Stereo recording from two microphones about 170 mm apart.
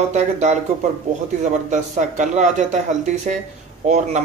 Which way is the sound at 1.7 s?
45° right (ahead or behind).